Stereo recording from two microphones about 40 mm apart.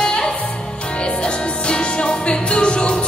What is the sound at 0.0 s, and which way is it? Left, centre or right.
Music, centre.